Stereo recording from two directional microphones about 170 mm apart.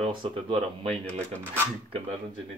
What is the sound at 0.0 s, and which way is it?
Speech, 30° right (ahead or behind).